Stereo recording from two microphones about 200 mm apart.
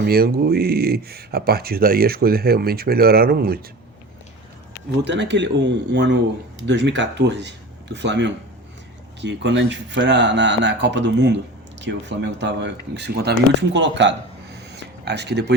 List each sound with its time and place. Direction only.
0.0 s speech: 50° right (ahead or behind)
5.0 s speech: 60° right (ahead or behind)
14.7 s a sound: 55° right (ahead or behind)